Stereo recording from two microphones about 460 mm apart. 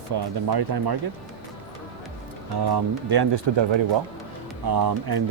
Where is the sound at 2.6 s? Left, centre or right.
Right.